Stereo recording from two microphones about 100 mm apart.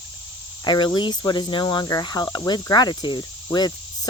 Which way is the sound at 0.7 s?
45° left (ahead or behind).